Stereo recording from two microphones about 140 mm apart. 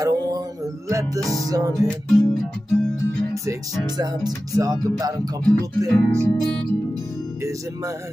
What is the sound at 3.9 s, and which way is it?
Speech, 30° right (ahead or behind).